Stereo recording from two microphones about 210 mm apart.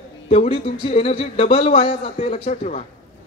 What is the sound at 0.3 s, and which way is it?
A man's voice, 30° left (ahead or behind).